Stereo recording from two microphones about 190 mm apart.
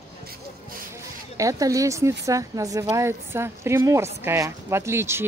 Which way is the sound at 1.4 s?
15° right (ahead or behind).